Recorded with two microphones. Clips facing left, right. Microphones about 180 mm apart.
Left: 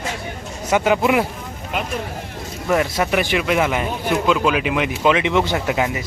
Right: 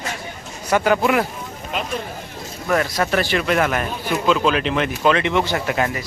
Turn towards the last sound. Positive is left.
turn(degrees=15)  # may be behind; listen again after turning